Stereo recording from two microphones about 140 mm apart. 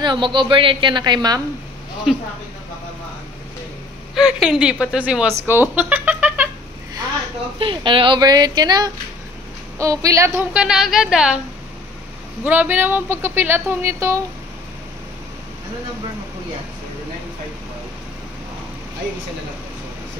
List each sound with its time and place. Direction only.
0.0 s a woman's voice: 35° right (ahead or behind)
2.1 s a woman's voice: centre (ahead or behind)
4.1 s a woman's voice: 5° right (ahead or behind)
7.5 s a woman's voice: 35° right (ahead or behind); by 10.4 s 20° right (ahead or behind)
10.5 s a woman's voice: 5° right (ahead or behind)
12.4 s speech: 10° right (ahead or behind)